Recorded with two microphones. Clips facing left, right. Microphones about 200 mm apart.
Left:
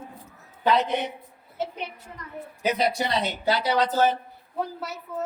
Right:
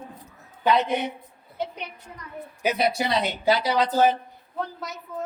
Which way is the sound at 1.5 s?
5° left (ahead or behind).